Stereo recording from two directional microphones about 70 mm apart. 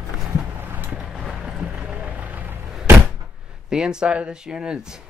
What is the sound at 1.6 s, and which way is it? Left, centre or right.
Vehicle, centre.